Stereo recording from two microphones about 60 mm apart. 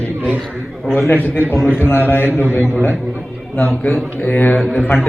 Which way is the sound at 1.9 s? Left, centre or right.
Left.